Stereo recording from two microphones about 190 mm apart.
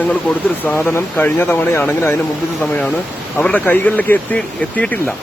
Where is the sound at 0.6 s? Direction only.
10° left (ahead or behind).